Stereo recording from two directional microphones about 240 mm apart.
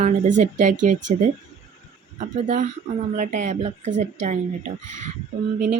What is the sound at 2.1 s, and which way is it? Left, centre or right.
Speech, right.